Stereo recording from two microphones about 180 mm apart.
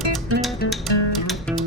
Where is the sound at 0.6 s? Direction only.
70° left (ahead or behind).